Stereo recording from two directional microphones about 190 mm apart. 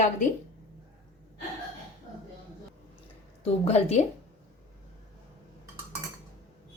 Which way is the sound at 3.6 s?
35° left (ahead or behind).